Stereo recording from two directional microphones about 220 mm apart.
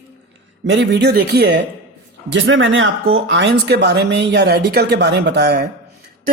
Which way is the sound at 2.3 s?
60° right (ahead or behind).